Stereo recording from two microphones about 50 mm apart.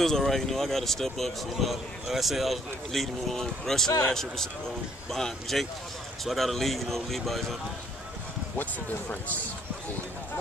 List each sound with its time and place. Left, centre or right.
0.0 s a man's voice: centre